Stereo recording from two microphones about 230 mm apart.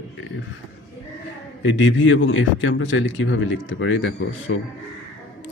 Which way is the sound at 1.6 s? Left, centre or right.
Left.